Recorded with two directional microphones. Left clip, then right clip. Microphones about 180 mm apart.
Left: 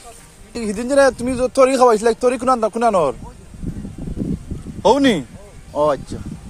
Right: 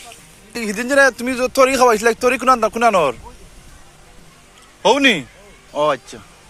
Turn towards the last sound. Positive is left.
turn(degrees=25)  # may be behind; listen again after turning